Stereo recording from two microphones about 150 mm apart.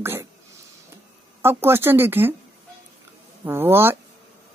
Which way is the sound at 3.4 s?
15° right (ahead or behind).